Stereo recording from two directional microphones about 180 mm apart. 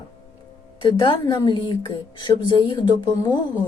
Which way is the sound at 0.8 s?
25° left (ahead or behind).